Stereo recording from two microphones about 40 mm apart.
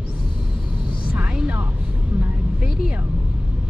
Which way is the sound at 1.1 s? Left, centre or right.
Right.